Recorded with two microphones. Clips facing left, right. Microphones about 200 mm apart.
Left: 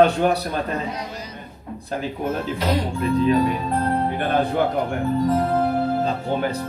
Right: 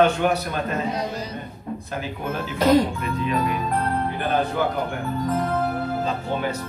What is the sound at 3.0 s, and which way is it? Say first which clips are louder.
Speech: left 6 dB; 35° left (ahead or behind).